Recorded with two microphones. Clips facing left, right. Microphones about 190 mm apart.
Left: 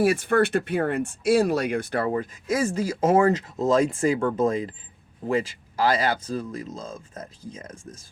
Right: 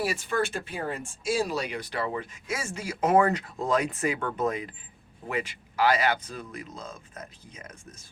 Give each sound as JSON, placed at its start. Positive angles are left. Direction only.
{"t": 0.0, "sound": "speech", "side_deg": 55}